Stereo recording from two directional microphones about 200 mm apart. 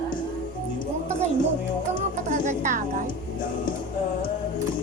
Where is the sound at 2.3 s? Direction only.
40° right (ahead or behind).